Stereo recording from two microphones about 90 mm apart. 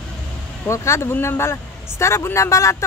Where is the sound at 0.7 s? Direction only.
30° left (ahead or behind).